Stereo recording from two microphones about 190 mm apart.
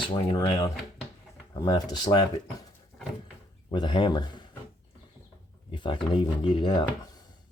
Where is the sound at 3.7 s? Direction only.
25° left (ahead or behind).